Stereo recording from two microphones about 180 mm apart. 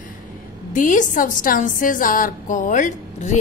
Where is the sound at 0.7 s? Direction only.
45° left (ahead or behind).